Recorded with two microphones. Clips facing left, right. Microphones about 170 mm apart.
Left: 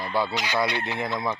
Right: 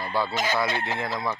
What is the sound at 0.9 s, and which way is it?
Speech, 20° left (ahead or behind).